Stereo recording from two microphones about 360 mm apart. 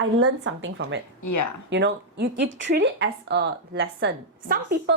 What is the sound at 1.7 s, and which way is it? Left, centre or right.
Speech, right.